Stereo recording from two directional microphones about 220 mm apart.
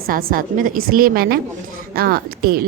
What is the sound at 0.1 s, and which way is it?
A woman's voice, 40° right (ahead or behind).